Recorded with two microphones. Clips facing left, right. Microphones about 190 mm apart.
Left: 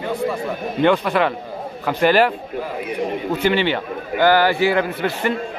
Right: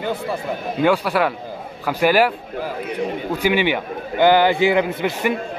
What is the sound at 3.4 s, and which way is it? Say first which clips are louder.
A man's voice: right 1 dB; 15° right (ahead or behind).